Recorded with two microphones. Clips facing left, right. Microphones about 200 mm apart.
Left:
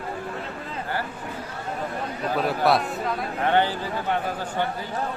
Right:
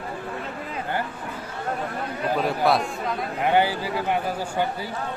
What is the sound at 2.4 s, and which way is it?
Speech, centre (ahead or behind).